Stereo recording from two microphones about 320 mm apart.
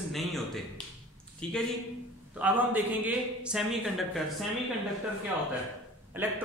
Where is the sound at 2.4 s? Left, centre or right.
Centre.